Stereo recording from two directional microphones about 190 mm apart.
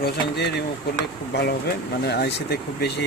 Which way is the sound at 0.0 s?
60° left (ahead or behind).